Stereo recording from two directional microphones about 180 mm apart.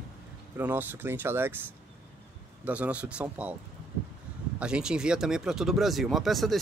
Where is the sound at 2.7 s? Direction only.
5° right (ahead or behind).